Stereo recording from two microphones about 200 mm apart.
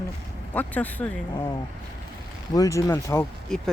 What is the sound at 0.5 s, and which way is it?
Speech, 10° left (ahead or behind).